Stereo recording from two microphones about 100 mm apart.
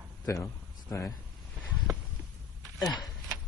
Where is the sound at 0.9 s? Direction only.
30° left (ahead or behind).